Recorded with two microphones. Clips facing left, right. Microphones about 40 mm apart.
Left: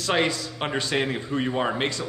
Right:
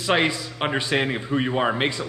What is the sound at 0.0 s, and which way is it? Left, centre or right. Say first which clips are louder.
A man's voice: right 2 dB; centre.